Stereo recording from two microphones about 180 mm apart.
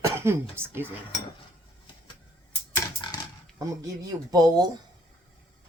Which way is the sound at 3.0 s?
25° left (ahead or behind).